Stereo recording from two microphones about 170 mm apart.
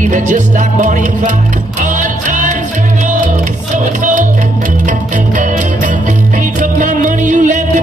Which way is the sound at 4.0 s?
50° right (ahead or behind).